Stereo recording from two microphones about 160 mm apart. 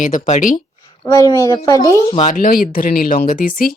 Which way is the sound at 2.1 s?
50° left (ahead or behind).